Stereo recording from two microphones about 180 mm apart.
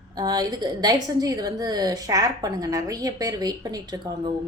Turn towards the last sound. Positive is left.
turn(degrees=-20)  # may be behind; listen again after turning